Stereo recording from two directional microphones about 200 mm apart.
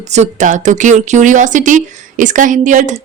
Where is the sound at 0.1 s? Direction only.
35° right (ahead or behind).